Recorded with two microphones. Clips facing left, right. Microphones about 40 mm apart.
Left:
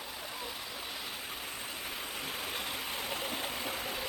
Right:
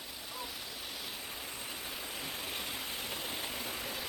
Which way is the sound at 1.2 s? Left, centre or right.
Left.